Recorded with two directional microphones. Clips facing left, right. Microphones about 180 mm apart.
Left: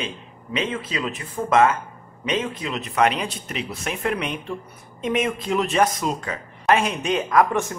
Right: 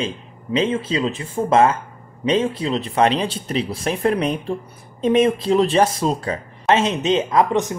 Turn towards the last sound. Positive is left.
turn(degrees=-20)  # may be behind; listen again after turning